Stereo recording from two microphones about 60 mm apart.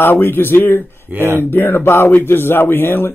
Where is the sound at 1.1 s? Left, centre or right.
Right.